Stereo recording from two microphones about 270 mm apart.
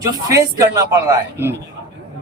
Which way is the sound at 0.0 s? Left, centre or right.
Centre.